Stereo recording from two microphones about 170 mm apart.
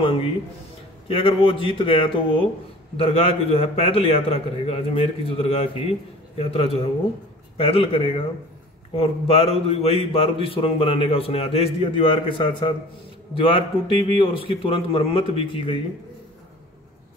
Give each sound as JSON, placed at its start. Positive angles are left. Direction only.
{"t": 0.0, "sound": "a man's voice", "side_deg": 35}